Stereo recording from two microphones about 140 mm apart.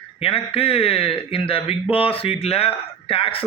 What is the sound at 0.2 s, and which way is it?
A man's voice, 45° left (ahead or behind).